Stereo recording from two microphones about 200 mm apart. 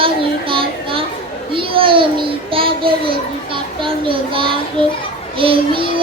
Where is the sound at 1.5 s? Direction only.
25° right (ahead or behind).